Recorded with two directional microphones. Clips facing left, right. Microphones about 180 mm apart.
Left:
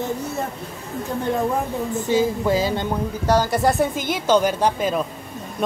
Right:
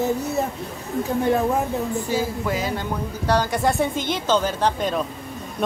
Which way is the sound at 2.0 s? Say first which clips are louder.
Left 5 dB; 25° left (ahead or behind).